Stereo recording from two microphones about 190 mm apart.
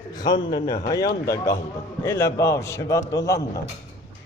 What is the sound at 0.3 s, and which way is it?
A man's voice, 25° left (ahead or behind).